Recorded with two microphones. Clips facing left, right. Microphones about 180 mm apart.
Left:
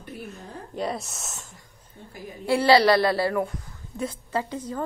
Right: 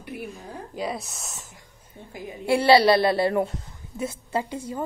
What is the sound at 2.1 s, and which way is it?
A woman's voice, 20° right (ahead or behind).